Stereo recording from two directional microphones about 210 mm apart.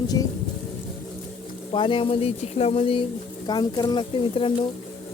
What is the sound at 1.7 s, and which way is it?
A woman's voice, 25° left (ahead or behind).